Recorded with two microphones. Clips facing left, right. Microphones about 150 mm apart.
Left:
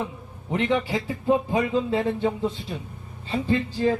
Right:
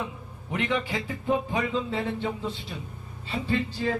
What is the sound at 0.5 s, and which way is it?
Speech, 35° left (ahead or behind).